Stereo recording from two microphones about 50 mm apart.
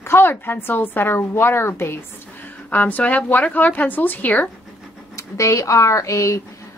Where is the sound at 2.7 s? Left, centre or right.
Left.